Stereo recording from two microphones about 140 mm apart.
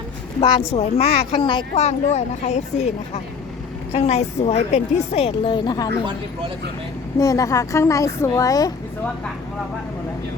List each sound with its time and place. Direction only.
0.3 s a woman's voice: 40° left (ahead or behind)
3.9 s a woman's voice: 50° left (ahead or behind); by 5.9 s 30° left (ahead or behind)
7.2 s a woman's voice: 25° left (ahead or behind)